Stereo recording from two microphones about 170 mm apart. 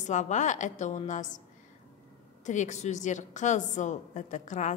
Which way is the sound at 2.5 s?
45° left (ahead or behind).